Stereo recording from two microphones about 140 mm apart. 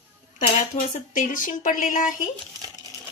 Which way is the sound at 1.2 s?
70° left (ahead or behind).